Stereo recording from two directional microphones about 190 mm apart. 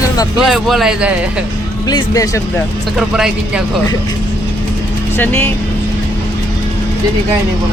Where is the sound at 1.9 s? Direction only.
20° left (ahead or behind).